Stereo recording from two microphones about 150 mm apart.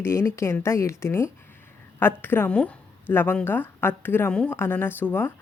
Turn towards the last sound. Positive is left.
turn(degrees=15)  # may be behind; listen again after turning